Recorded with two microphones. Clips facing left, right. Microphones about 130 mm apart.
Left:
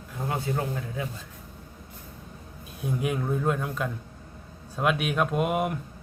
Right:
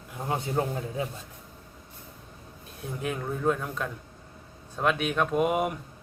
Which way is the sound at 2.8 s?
5° left (ahead or behind).